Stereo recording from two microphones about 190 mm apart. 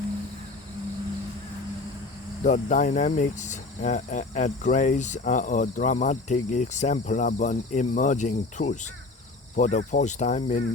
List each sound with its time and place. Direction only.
2.4 s speech: 40° left (ahead or behind)